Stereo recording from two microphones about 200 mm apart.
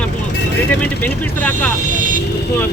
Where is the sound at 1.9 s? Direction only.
40° right (ahead or behind).